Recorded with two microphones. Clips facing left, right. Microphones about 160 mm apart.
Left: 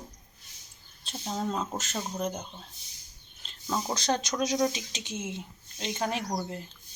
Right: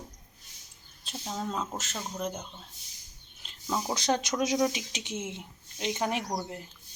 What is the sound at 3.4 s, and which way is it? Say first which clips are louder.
Speech: even; 10° right (ahead or behind).